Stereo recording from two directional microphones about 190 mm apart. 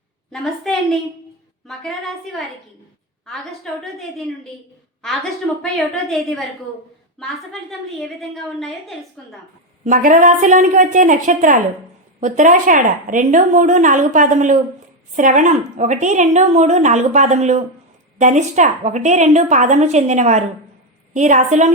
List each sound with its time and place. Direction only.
0.3 s a woman's voice: centre (ahead or behind)
3.2 s a woman's voice: centre (ahead or behind)
6.1 s a woman's voice: centre (ahead or behind)
7.7 s a woman's voice: centre (ahead or behind)
9.8 s a woman's voice: 45° right (ahead or behind)